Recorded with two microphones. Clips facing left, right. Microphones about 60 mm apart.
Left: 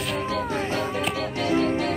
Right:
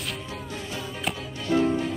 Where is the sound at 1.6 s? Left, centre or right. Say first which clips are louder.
Left 2 dB; left.